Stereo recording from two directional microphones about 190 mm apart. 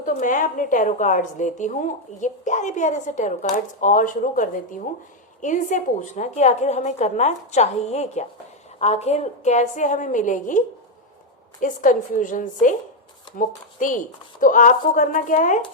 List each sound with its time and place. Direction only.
0.1 s a woman's voice: 40° left (ahead or behind)
11.6 s speech: 45° left (ahead or behind)